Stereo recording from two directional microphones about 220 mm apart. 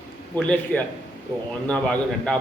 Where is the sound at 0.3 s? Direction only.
5° left (ahead or behind).